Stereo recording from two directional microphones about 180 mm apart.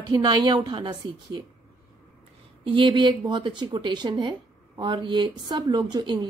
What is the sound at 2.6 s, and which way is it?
Speech, 30° right (ahead or behind).